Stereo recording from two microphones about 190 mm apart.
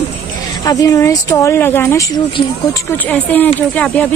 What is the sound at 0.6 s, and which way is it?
Speech, 20° left (ahead or behind).